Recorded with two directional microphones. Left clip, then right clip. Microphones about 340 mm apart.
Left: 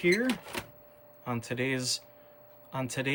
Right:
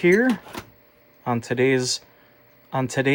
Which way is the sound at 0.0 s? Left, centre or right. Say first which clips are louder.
Right 9 dB; centre.